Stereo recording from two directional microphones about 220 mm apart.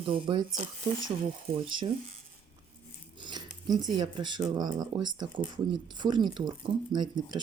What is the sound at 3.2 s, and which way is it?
Speech, 20° right (ahead or behind).